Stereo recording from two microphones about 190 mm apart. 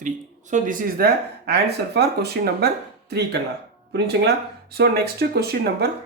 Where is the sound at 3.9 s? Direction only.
60° right (ahead or behind).